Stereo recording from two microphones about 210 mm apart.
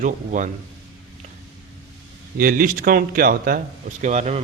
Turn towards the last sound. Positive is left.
turn(degrees=-35)  # may be behind; listen again after turning